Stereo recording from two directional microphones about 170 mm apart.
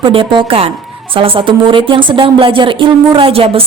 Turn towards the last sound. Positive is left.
turn(degrees=-35)  # may be behind; listen again after turning